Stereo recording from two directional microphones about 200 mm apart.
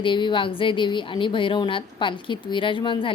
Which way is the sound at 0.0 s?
25° left (ahead or behind).